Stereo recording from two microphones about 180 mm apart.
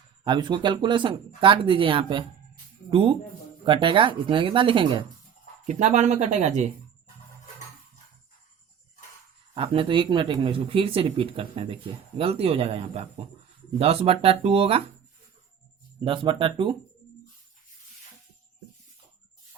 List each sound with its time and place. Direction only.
0.3 s speech: 25° right (ahead or behind)
5.6 s speech: 40° right (ahead or behind)
9.6 s speech: 30° right (ahead or behind)
16.0 s speech: 30° right (ahead or behind)